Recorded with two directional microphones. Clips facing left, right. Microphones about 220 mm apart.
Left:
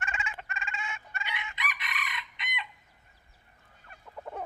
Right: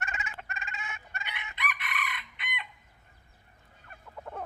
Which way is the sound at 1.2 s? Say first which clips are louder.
Even; 55° right (ahead or behind).